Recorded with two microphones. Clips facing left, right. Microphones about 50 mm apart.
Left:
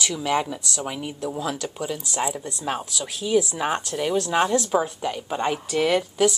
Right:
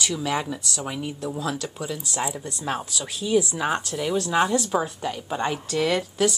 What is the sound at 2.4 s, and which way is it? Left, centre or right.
Speech, centre.